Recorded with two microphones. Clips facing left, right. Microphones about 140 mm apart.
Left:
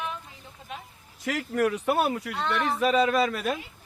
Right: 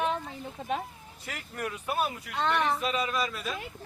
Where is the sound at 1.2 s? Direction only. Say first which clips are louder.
Left 11 dB; 90° left; by 2.3 s 65° left (ahead or behind).